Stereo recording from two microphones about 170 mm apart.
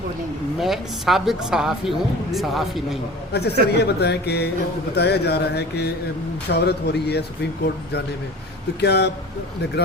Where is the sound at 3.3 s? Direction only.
75° left (ahead or behind).